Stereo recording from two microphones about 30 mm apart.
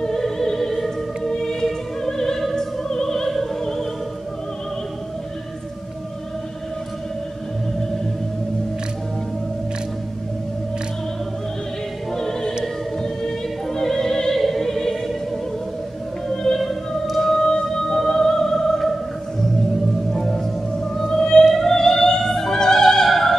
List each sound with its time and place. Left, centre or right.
0.1 s music: centre
2.5 s opera: left
12.1 s music: centre
13.0 s opera: centre
14.4 s music: centre
16.5 s opera: centre
17.4 s music: left
20.1 s music: centre
21.5 s opera: centre
23.0 s opera: centre